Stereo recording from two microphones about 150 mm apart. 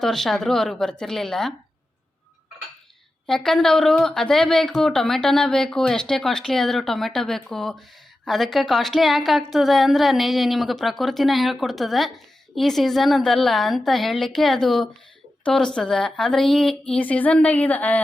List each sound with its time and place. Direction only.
0.0 s a woman's voice: centre (ahead or behind)
3.2 s a woman's voice: 5° left (ahead or behind)